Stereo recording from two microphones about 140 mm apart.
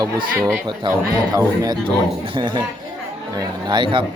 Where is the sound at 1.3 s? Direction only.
30° right (ahead or behind).